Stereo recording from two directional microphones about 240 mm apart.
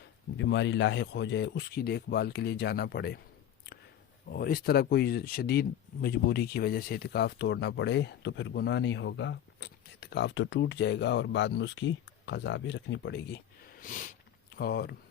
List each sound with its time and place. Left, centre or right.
0.3 s speech: left
4.3 s speech: left
13.8 s a sound: left
14.5 s speech: left